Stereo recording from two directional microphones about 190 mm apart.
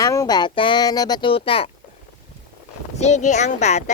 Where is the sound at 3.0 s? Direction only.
40° left (ahead or behind).